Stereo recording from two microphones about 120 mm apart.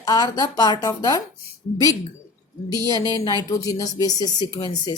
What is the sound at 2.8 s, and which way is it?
Speech, 30° left (ahead or behind).